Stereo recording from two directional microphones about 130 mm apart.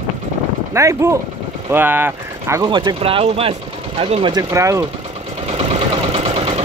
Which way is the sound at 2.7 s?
35° right (ahead or behind).